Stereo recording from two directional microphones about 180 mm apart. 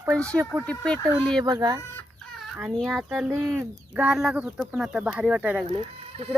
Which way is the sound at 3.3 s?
10° right (ahead or behind).